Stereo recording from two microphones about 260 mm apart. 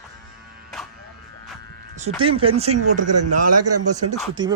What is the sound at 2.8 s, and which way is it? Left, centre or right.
A man's voice, right.